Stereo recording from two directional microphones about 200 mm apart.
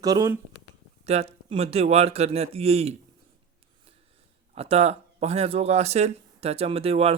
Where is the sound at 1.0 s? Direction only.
30° right (ahead or behind).